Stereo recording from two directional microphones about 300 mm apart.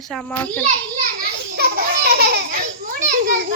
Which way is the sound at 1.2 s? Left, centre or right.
Right.